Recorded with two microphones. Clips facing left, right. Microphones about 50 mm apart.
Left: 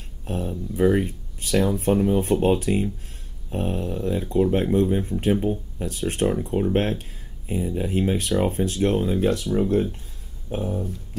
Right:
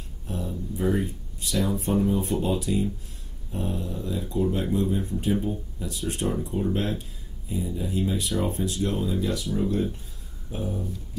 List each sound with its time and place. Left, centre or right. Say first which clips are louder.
0.3 s speech: left 4 dB; left